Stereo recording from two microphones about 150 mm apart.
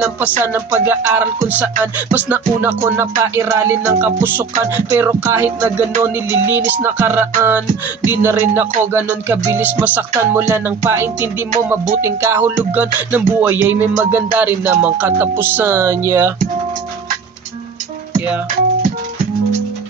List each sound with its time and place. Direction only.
0.5 s music: 15° right (ahead or behind)